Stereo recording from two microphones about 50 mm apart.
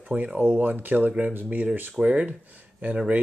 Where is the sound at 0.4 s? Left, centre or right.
Right.